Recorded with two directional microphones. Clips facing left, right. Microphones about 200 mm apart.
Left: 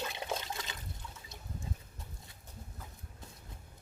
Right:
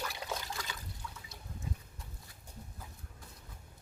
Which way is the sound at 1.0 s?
25° left (ahead or behind).